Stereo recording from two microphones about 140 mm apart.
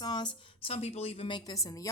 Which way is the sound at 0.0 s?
30° left (ahead or behind).